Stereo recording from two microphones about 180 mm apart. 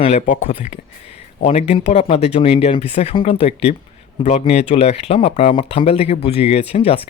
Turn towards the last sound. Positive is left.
turn(degrees=35)  # may be behind; listen again after turning